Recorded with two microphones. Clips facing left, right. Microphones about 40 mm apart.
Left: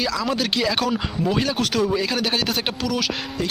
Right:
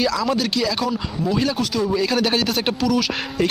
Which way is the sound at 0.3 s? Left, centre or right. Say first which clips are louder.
Right 1 dB; left.